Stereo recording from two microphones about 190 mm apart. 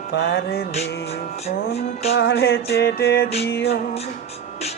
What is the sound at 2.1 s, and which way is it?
Music, 60° left (ahead or behind).